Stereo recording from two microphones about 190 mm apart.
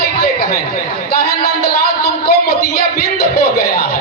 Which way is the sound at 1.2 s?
55° left (ahead or behind).